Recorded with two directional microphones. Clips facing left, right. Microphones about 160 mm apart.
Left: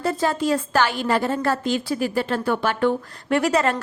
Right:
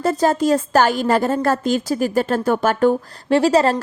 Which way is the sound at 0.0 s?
40° right (ahead or behind).